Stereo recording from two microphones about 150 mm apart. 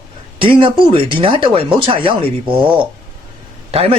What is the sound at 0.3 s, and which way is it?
A man's voice, 35° right (ahead or behind).